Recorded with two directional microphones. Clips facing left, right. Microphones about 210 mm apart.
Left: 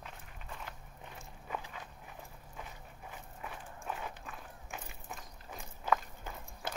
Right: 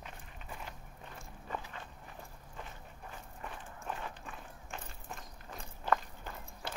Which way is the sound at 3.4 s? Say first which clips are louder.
Even; 5° left (ahead or behind).